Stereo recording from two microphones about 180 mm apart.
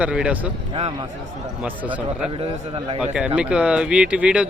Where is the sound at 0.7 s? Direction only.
30° right (ahead or behind).